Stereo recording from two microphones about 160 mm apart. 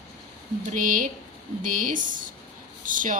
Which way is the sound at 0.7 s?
55° right (ahead or behind).